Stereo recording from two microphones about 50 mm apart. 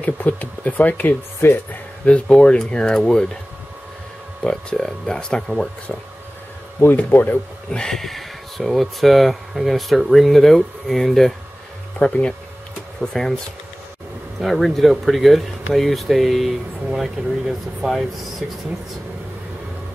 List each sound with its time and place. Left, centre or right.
0.0 s speech: left
1.4 s speech: left
2.0 s speech: left
4.7 s speech: centre
7.0 s speech: left
7.7 s speech: centre
12.0 s speech: left
13.0 s speech: centre
14.4 s speech: centre